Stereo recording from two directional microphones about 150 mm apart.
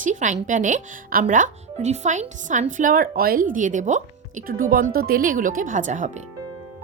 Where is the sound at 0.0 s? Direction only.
55° right (ahead or behind).